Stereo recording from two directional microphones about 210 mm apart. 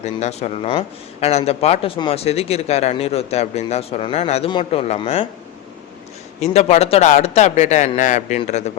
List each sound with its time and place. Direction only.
0.0 s speech: 30° left (ahead or behind)
6.4 s speech: 30° left (ahead or behind)